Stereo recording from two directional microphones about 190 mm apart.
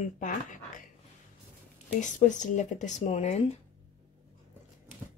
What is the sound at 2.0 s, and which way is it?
Speech, 40° left (ahead or behind).